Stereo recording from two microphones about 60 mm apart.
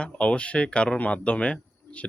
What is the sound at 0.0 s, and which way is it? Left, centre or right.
Speech, centre.